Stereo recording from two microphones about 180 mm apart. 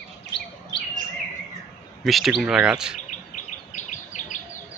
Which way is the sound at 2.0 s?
Centre (ahead or behind).